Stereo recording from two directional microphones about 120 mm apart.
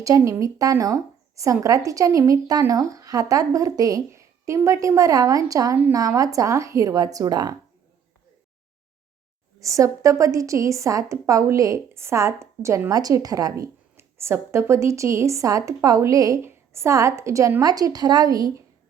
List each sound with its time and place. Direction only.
0.0 s a woman's voice: 25° right (ahead or behind)
9.6 s a woman's voice: 25° right (ahead or behind)